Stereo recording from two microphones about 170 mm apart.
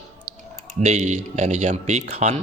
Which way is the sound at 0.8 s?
40° right (ahead or behind).